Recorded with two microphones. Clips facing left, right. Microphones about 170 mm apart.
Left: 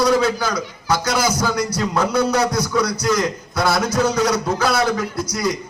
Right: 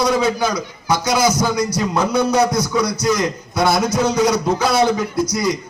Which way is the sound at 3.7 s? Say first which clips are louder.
Even; 20° right (ahead or behind).